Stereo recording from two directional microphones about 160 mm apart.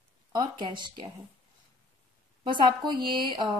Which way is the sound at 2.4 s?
30° right (ahead or behind).